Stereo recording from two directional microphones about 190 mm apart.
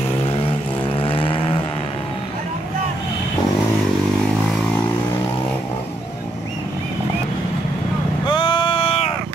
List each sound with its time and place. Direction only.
0.9 s vehicle: 30° left (ahead or behind)
8.3 s vehicle: 25° left (ahead or behind)